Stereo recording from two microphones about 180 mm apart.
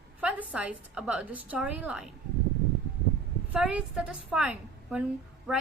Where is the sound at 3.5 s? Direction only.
5° right (ahead or behind).